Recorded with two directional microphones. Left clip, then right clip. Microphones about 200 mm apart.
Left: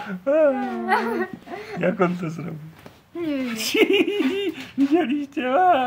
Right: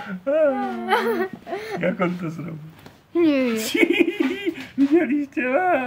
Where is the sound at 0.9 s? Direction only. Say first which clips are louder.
Right 2 dB; 45° right (ahead or behind).